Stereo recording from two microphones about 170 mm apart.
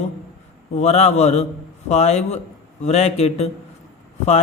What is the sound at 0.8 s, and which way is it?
A man's voice, 40° left (ahead or behind).